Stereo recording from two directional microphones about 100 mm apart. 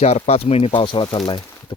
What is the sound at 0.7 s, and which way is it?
Speech, 55° left (ahead or behind).